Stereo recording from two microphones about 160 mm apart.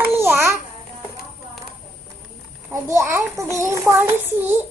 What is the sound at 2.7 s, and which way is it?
A child's voice, 15° right (ahead or behind).